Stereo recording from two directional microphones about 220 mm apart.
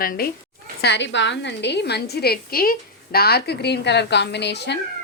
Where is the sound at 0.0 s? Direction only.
40° left (ahead or behind).